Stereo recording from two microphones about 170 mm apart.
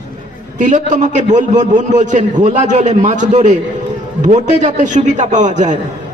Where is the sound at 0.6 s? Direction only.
45° right (ahead or behind).